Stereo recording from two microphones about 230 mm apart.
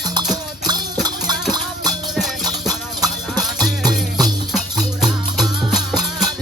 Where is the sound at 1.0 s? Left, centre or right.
Centre.